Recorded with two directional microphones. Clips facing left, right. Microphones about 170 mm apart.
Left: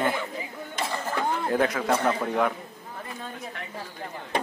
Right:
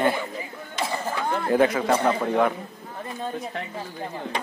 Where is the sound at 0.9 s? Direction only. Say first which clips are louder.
Right 1 dB; 10° right (ahead or behind).